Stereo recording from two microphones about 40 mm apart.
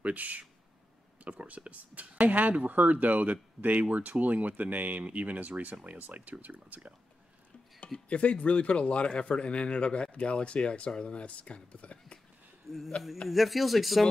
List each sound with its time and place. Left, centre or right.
0.0 s speech: right
8.1 s a man's voice: left
13.3 s speech: centre